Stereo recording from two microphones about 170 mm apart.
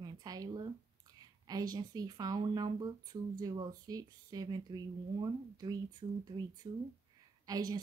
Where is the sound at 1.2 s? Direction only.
20° right (ahead or behind).